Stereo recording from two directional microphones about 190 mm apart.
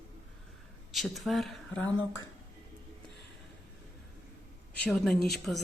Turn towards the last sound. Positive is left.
turn(degrees=0)  # may be behind; listen again after turning